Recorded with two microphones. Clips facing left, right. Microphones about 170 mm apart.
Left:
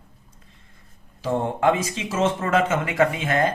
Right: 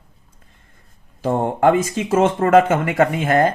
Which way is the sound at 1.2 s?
50° right (ahead or behind).